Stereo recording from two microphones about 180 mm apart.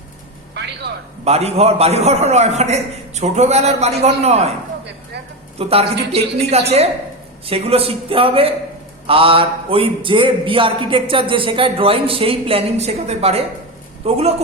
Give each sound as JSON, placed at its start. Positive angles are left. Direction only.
{"t": 1.2, "sound": "speech", "side_deg": -35}
{"t": 5.5, "sound": "speech", "side_deg": -35}